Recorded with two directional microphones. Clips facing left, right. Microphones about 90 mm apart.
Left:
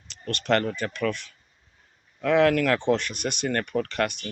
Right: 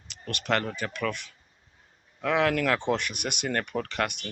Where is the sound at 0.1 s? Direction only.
10° right (ahead or behind).